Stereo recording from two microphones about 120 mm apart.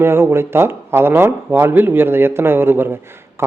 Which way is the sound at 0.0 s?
20° right (ahead or behind).